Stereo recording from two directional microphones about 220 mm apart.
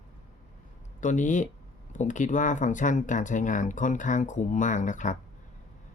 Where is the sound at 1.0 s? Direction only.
35° left (ahead or behind).